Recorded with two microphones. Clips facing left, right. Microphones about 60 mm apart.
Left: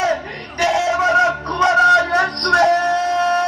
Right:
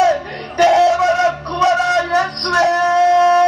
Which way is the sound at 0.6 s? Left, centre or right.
Centre.